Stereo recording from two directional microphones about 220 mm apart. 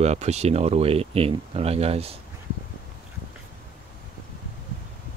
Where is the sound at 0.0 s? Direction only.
30° right (ahead or behind).